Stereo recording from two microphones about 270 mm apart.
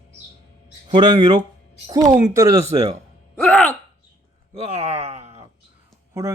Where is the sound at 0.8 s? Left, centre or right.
Centre.